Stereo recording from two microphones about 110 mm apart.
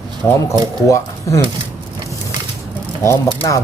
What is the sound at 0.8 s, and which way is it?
Speech, 30° left (ahead or behind).